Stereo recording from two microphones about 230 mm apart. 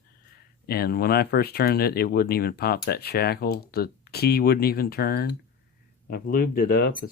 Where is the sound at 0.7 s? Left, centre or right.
Left.